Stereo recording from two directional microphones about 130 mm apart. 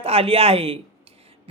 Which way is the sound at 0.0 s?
50° right (ahead or behind).